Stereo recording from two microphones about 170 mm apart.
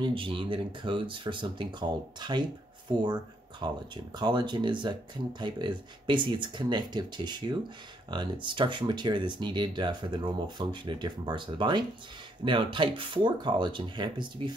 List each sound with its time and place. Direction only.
0.0 s speech: 30° right (ahead or behind)